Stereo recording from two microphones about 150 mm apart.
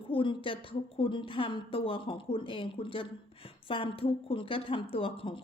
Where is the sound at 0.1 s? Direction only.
35° left (ahead or behind).